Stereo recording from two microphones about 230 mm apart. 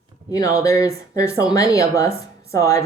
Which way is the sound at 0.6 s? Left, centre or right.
Centre.